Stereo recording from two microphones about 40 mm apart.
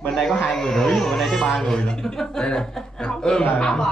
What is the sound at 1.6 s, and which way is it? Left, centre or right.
Chuckle, centre.